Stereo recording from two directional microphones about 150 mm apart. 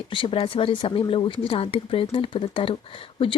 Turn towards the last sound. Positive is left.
turn(degrees=35)  # may be behind; listen again after turning